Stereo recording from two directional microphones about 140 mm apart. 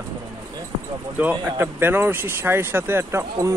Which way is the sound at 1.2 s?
15° right (ahead or behind).